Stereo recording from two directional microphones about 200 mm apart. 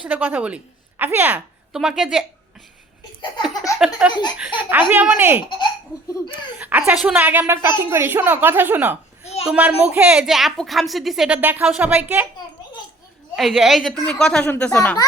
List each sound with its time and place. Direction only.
0.0 s a woman's voice: 10° right (ahead or behind)
3.8 s a woman's voice: 5° right (ahead or behind)
4.1 s speech: 20° left (ahead or behind)
4.7 s a woman's voice: 10° right (ahead or behind)
6.6 s a woman's voice: 10° right (ahead or behind)
13.3 s a woman's voice: centre (ahead or behind)